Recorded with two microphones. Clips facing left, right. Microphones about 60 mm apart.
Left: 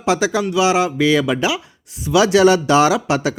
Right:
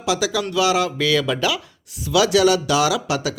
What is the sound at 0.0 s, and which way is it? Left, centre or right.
Speech, left.